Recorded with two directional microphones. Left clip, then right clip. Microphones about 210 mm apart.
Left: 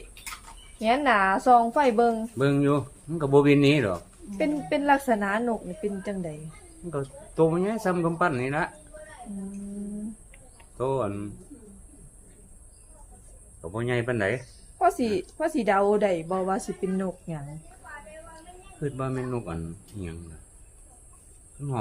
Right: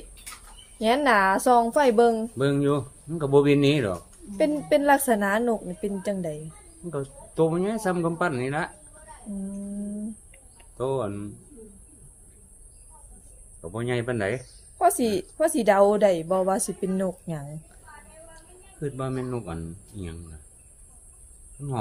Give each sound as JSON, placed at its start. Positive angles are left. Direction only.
{"t": 0.8, "sound": "a woman's voice", "side_deg": -35}
{"t": 2.4, "sound": "speech", "side_deg": 0}
{"t": 4.4, "sound": "a woman's voice", "side_deg": -35}
{"t": 6.9, "sound": "speech", "side_deg": 0}
{"t": 10.6, "sound": "speech", "side_deg": 0}
{"t": 13.6, "sound": "speech", "side_deg": 0}
{"t": 14.8, "sound": "a woman's voice", "side_deg": -35}
{"t": 18.8, "sound": "speech", "side_deg": 0}